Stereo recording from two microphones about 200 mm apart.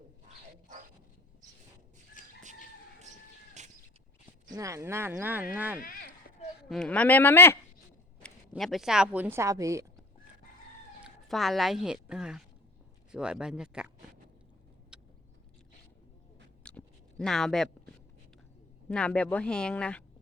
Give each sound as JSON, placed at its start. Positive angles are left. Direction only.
{"t": 2.2, "sound": "chicken", "side_deg": 40}
{"t": 3.6, "sound": "a sound", "side_deg": -35}
{"t": 4.5, "sound": "speech", "side_deg": -15}
{"t": 5.8, "sound": "a sound", "side_deg": 45}
{"t": 6.7, "sound": "speech", "side_deg": 5}
{"t": 8.2, "sound": "a woman's voice", "side_deg": 0}
{"t": 11.0, "sound": "speech", "side_deg": 0}
{"t": 14.9, "sound": "vehicle", "side_deg": -5}
{"t": 16.6, "sound": "a sound", "side_deg": 5}
{"t": 18.9, "sound": "speech", "side_deg": 5}